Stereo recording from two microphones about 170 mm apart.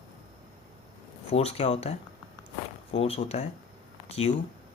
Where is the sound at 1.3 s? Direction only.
40° left (ahead or behind).